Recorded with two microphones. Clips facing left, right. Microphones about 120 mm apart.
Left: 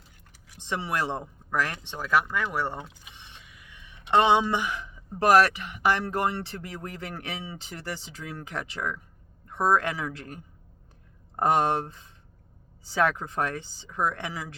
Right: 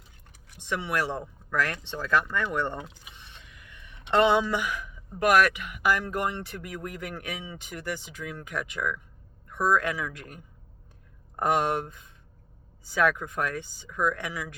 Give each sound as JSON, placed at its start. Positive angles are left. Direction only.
{"t": 0.6, "sound": "speech", "side_deg": 30}